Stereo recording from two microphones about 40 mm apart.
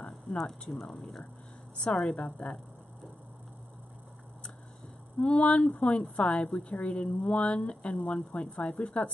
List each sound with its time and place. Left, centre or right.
0.4 s speech: centre
2.0 s a woman's voice: left
5.2 s a woman's voice: left